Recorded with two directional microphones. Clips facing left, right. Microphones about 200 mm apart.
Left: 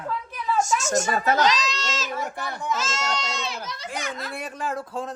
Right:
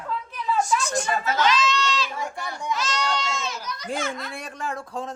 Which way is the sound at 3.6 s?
25° left (ahead or behind).